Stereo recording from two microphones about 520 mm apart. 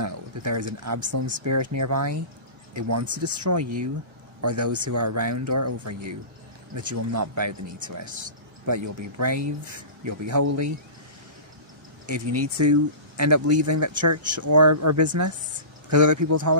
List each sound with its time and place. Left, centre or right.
0.0 s speech: right
4.4 s speech: right
12.1 s speech: right